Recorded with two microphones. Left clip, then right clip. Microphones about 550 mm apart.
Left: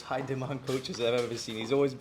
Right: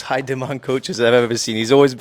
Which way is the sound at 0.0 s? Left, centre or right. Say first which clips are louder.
Right 12 dB; right.